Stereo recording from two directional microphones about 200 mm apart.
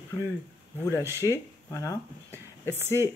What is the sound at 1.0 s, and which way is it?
Speech, 15° right (ahead or behind).